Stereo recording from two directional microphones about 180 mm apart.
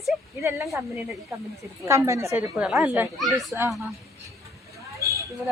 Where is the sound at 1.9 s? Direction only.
15° right (ahead or behind).